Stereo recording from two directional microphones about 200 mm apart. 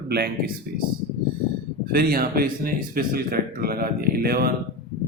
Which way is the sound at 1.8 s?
50° right (ahead or behind).